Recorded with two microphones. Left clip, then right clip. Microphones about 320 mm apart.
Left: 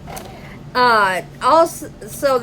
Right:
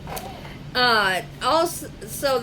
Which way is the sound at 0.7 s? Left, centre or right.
Left.